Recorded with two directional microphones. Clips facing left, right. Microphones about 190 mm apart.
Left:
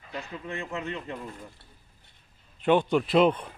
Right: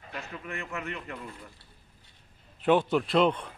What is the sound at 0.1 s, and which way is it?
A man's voice, 30° left (ahead or behind).